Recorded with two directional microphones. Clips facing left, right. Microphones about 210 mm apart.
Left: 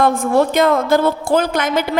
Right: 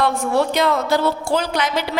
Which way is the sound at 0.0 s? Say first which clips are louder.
Left 4 dB; 50° left (ahead or behind).